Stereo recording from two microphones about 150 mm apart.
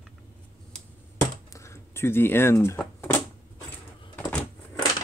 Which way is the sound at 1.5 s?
20° left (ahead or behind).